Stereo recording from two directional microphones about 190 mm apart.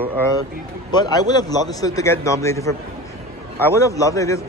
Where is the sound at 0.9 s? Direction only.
20° left (ahead or behind).